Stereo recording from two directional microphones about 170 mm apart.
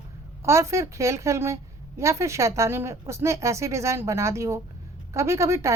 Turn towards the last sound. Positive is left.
turn(degrees=-15)  # may be behind; listen again after turning